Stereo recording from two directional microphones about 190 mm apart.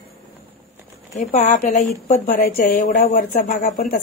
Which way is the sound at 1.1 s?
35° left (ahead or behind).